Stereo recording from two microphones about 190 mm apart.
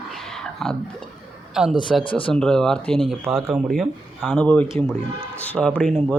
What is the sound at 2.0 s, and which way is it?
Speech, 25° left (ahead or behind).